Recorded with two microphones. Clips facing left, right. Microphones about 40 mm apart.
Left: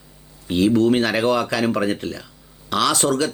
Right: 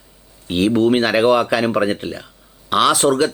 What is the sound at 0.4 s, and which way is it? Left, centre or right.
Speech, right.